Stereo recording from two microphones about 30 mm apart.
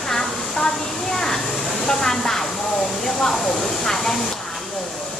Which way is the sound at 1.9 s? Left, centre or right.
Centre.